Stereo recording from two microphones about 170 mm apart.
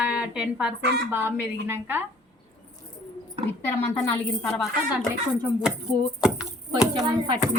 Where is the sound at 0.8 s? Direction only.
75° right (ahead or behind).